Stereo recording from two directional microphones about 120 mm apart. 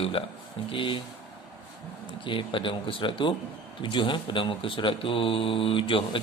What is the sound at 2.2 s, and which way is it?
Speech, 45° left (ahead or behind).